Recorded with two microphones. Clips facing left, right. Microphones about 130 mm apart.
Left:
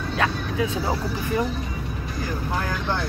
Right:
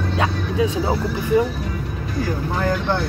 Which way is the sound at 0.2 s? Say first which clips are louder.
Right 3 dB; 20° right (ahead or behind).